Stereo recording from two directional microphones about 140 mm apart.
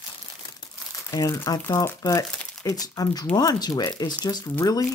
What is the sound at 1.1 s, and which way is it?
Speech, 25° left (ahead or behind).